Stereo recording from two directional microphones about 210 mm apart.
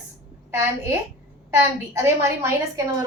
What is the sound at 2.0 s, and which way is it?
Speech, 10° right (ahead or behind).